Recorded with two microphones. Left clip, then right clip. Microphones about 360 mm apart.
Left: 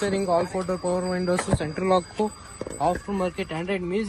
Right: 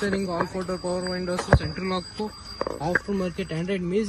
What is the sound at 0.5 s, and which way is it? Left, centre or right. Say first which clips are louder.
Speech: left 3 dB; left.